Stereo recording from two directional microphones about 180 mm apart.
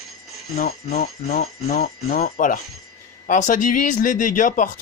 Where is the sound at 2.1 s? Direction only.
55° left (ahead or behind).